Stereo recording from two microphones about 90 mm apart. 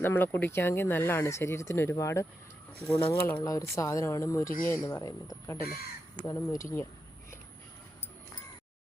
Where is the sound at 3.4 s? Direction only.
40° left (ahead or behind).